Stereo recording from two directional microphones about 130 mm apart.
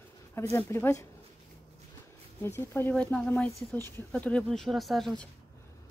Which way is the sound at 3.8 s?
20° left (ahead or behind).